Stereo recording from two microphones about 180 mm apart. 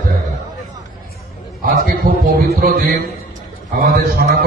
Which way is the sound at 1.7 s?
55° right (ahead or behind).